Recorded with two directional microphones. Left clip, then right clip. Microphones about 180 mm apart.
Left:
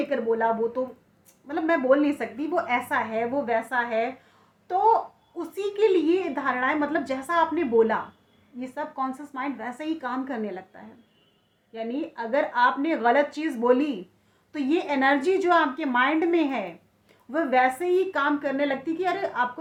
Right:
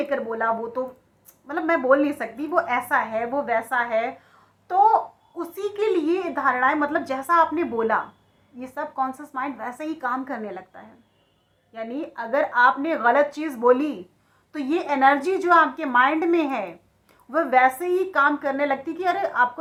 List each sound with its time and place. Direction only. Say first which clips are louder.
0.1 s a woman's voice: even; 35° left (ahead or behind)
11.7 s a woman's voice: even; 35° left (ahead or behind)